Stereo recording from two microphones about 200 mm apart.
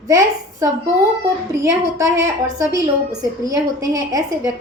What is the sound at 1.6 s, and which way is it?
A woman's voice, 15° right (ahead or behind).